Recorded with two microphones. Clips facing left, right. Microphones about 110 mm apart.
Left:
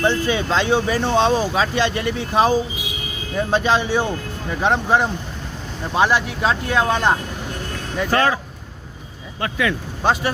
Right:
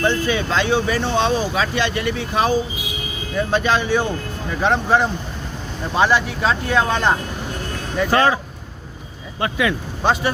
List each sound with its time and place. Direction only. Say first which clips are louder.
0.0 s speech: even; 25° left (ahead or behind)
4.6 s speech: right 1 dB; 15° left (ahead or behind)
8.1 s speech: right 2 dB; 15° right (ahead or behind)
9.4 s speech: right 2 dB; 15° right (ahead or behind)
10.0 s speech: even; 5° left (ahead or behind)